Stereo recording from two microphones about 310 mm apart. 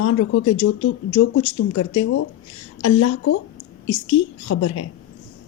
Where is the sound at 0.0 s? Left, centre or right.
Left.